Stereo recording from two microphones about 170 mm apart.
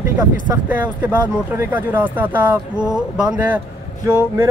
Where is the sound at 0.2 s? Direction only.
10° right (ahead or behind).